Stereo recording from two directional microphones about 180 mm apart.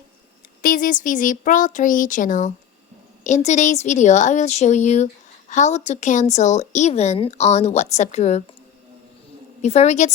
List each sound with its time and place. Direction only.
0.6 s a woman's voice: 50° left (ahead or behind)
9.6 s a woman's voice: 40° left (ahead or behind)